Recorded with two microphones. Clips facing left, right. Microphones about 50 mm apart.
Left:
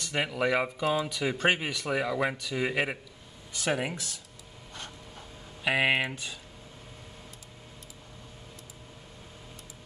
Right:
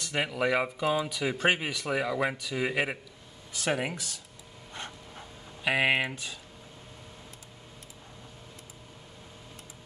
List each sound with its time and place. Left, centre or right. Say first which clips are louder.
0.0 s speech: even; centre
4.8 s printer: right 3 dB; right
5.6 s speech: even; centre